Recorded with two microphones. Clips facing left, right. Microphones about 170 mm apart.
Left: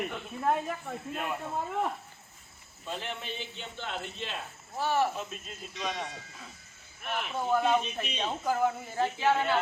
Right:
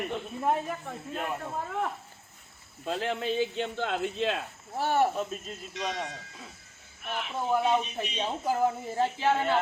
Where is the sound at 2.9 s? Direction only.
85° right.